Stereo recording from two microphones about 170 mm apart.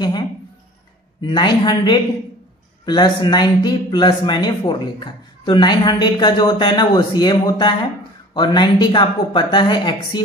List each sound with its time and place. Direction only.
1.2 s a man's voice: 25° left (ahead or behind)